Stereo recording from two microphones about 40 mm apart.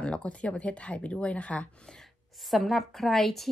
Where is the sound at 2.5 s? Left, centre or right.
Centre.